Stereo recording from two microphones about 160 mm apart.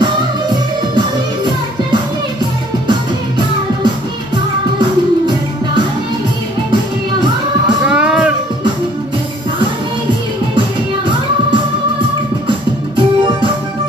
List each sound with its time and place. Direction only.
0.0 s music: 30° right (ahead or behind)
7.8 s music: 5° right (ahead or behind)
12.4 s music: 30° right (ahead or behind)